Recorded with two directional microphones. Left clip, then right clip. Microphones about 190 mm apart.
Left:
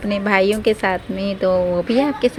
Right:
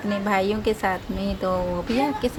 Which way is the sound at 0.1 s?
20° left (ahead or behind).